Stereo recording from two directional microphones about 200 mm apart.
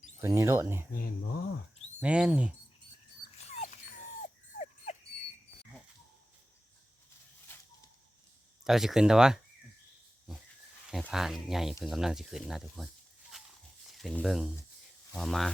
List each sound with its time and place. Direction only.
0.2 s speech: 15° right (ahead or behind)
0.9 s speech: 45° left (ahead or behind)
2.0 s speech: 5° right (ahead or behind)
3.3 s dog: 35° left (ahead or behind)
8.6 s speech: centre (ahead or behind)
11.1 s speech: centre (ahead or behind)
13.3 s a sound: centre (ahead or behind)
14.0 s speech: centre (ahead or behind)